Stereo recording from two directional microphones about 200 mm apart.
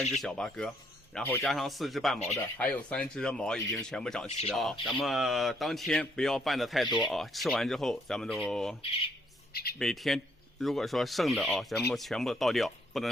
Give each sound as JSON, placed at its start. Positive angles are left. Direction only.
{"t": 0.0, "sound": "speech", "side_deg": 0}
{"t": 9.5, "sound": "speech", "side_deg": 50}
{"t": 9.7, "sound": "speech", "side_deg": 0}